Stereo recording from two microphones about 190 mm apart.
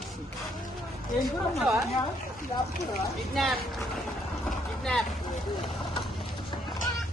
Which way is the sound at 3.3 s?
Centre (ahead or behind).